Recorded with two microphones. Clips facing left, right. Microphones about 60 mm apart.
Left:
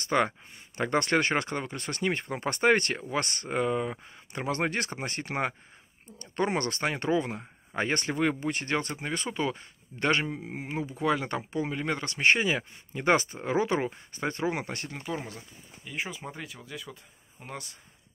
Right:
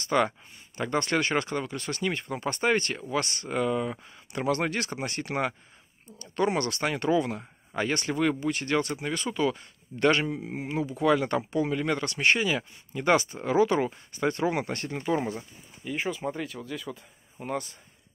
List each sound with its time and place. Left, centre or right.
0.0 s speech: left
0.7 s speech: left
1.3 s speech: left
3.4 s speech: left
5.3 s speech: centre
6.3 s speech: left
7.8 s speech: left
8.1 s speech: left
10.4 s speech: centre
10.7 s speech: centre
15.1 s speech: centre